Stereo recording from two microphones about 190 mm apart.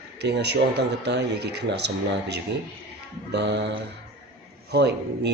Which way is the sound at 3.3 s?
65° right (ahead or behind).